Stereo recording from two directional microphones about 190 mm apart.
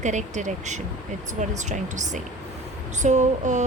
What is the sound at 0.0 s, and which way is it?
A woman's voice, 40° right (ahead or behind).